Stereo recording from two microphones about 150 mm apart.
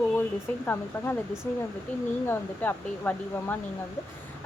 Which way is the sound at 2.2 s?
15° left (ahead or behind).